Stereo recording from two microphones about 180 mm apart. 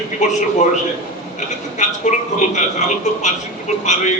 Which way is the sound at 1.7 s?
40° left (ahead or behind).